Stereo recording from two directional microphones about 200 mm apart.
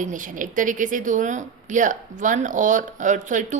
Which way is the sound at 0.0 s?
40° right (ahead or behind).